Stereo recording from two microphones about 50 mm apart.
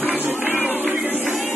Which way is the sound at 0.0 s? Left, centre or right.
Right.